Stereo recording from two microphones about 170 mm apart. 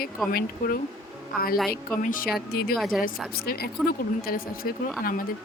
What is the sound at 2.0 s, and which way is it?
Speech, 50° left (ahead or behind).